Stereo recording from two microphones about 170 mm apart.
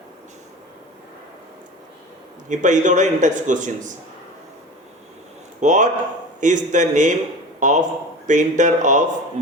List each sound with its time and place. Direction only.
2.5 s a man's voice: 45° right (ahead or behind)
5.5 s a man's voice: 45° right (ahead or behind)